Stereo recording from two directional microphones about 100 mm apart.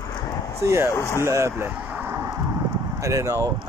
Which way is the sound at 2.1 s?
35° right (ahead or behind).